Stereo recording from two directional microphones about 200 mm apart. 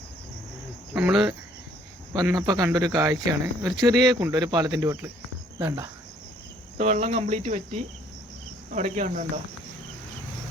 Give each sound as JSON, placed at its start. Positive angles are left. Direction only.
{"t": 0.9, "sound": "cricket", "side_deg": -5}
{"t": 2.1, "sound": "speech", "side_deg": -20}
{"t": 6.7, "sound": "cricket", "side_deg": -35}